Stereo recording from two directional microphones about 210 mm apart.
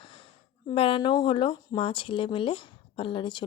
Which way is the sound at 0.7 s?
25° left (ahead or behind).